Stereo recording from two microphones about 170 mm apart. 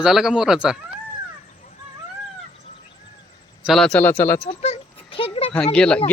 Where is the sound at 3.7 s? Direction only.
5° left (ahead or behind).